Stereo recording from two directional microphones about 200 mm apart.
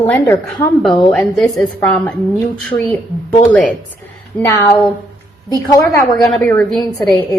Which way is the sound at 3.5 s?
5° left (ahead or behind).